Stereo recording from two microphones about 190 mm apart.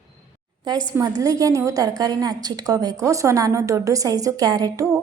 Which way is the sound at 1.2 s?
20° right (ahead or behind).